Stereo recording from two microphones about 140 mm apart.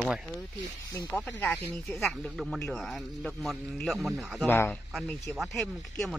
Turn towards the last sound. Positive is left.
turn(degrees=0)  # may be behind; listen again after turning